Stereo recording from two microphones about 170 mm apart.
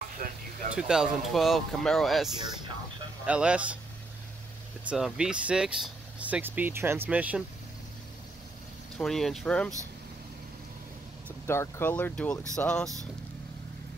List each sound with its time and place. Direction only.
0.2 s a sound: 50° right (ahead or behind)
0.7 s speech: 5° right (ahead or behind)
4.8 s speech: 5° right (ahead or behind)
8.9 s speech: centre (ahead or behind)
11.4 s speech: 15° left (ahead or behind)